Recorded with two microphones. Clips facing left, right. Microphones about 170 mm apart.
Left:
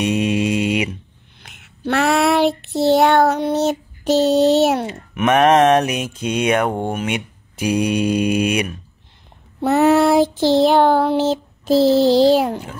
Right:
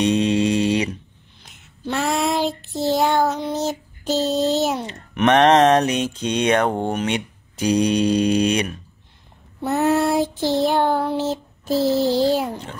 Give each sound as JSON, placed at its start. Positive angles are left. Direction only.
{"t": 0.0, "sound": "mantra", "side_deg": 10}
{"t": 1.4, "sound": "child singing", "side_deg": 70}
{"t": 4.8, "sound": "mantra", "side_deg": 10}
{"t": 9.6, "sound": "child singing", "side_deg": 80}